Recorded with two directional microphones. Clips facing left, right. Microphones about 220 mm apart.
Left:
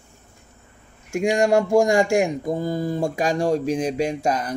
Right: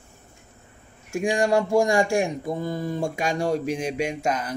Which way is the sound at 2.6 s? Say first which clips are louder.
Left 3 dB; 40° left (ahead or behind).